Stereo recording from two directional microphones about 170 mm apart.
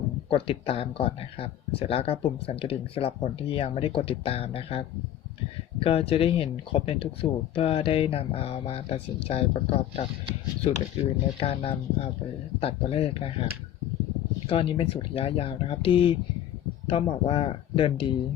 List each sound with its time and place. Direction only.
0.3 s speech: 35° left (ahead or behind)